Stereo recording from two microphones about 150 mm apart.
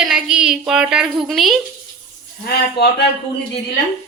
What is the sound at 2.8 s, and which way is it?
Speech, 90° left.